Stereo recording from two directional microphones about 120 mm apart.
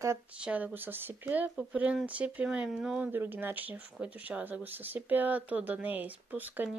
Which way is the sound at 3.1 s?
15° right (ahead or behind).